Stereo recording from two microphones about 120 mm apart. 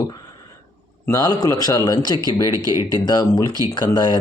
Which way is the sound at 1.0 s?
30° left (ahead or behind).